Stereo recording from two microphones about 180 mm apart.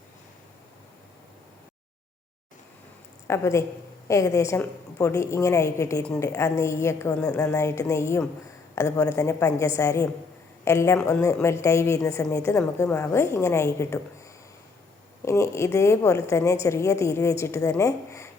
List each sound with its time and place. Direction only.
3.2 s a woman's voice: 15° left (ahead or behind)
15.2 s a woman's voice: 15° left (ahead or behind)